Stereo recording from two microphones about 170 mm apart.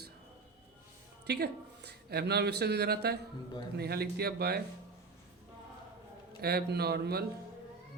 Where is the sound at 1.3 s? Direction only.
70° right (ahead or behind).